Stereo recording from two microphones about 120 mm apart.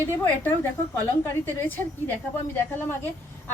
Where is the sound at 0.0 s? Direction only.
15° left (ahead or behind).